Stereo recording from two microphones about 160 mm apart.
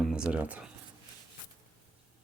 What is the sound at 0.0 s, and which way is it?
Speech, 5° right (ahead or behind).